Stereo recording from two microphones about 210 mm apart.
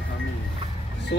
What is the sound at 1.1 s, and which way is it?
Speech, 55° left (ahead or behind).